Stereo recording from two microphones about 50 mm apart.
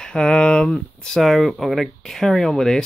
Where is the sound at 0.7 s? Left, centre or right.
Centre.